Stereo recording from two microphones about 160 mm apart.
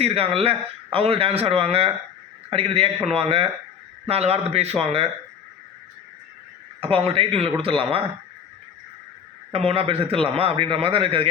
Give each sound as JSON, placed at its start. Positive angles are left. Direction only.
{"t": 0.0, "sound": "a man's voice", "side_deg": -40}
{"t": 6.7, "sound": "a man's voice", "side_deg": -35}
{"t": 9.5, "sound": "a man's voice", "side_deg": -35}